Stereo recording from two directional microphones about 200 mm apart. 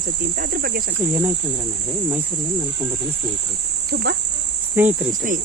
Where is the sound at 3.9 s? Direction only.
55° right (ahead or behind).